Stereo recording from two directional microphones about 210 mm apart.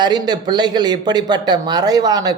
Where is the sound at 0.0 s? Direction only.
20° right (ahead or behind).